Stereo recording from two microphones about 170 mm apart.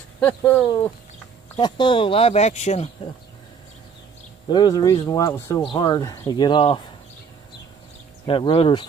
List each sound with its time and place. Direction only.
0.2 s speech: 10° left (ahead or behind)
1.6 s speech: 30° left (ahead or behind)
4.5 s speech: 25° left (ahead or behind)
8.3 s speech: 35° left (ahead or behind)